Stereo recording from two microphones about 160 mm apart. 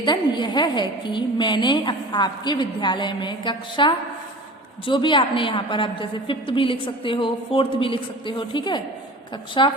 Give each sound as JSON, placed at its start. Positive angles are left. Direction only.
{"t": 0.0, "sound": "a woman's voice", "side_deg": 25}